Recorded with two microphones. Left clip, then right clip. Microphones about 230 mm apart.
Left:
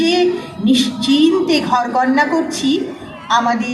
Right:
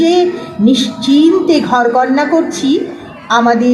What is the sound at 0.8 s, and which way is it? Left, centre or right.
Speech, centre.